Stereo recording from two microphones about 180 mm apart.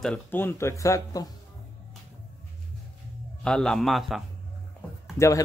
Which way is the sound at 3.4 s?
5° left (ahead or behind).